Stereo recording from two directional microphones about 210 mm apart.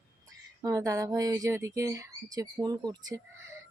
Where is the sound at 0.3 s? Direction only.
15° right (ahead or behind).